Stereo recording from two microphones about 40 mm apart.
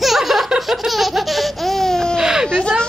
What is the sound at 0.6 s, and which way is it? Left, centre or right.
Laughter, centre.